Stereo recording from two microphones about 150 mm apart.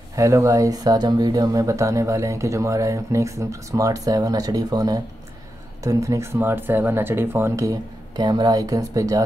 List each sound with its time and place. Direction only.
0.1 s speech: 20° right (ahead or behind)